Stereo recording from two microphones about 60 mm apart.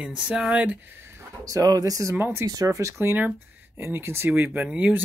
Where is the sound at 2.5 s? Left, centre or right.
Right.